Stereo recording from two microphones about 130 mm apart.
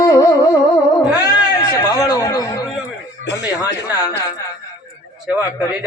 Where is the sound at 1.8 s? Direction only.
25° left (ahead or behind).